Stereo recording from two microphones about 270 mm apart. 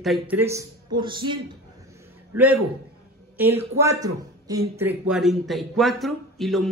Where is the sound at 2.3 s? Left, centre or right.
Centre.